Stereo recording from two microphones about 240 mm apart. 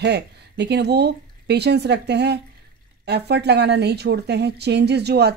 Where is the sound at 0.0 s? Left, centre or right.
Right.